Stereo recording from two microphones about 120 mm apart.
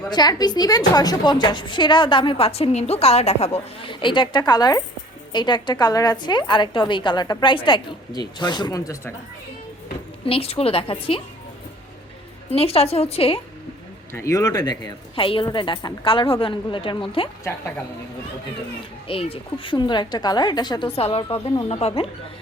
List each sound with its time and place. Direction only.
0.1 s a woman's voice: 35° left (ahead or behind); by 3.8 s 60° left (ahead or behind)
3.8 s a woman's voice: 40° left (ahead or behind)
10.2 s a woman's voice: 55° left (ahead or behind)
12.5 s a woman's voice: 55° left (ahead or behind)
14.1 s a woman's voice: 25° left (ahead or behind); by 17.2 s 45° left (ahead or behind)
19.0 s a woman's voice: 50° left (ahead or behind)